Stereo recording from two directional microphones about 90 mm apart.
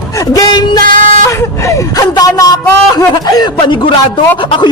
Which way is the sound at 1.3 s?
35° left (ahead or behind).